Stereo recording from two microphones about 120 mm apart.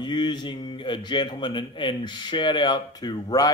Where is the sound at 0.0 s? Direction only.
35° left (ahead or behind).